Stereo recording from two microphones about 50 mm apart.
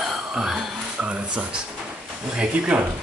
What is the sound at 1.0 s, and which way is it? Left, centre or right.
Speech, right.